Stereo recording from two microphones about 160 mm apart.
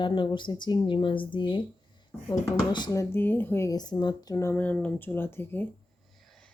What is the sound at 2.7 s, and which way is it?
Speech, 25° left (ahead or behind).